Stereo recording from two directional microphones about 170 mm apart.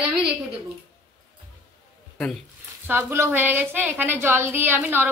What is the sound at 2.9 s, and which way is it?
A woman's voice, 15° right (ahead or behind).